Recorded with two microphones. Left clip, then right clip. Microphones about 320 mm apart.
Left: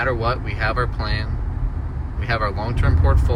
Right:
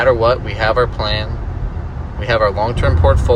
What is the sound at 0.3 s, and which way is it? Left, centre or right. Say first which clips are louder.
Speech: right 8 dB; centre.